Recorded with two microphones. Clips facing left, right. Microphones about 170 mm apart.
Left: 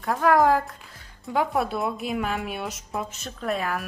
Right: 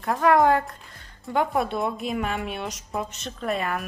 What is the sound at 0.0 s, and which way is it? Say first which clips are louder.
A woman's voice: right 1 dB; centre (ahead or behind).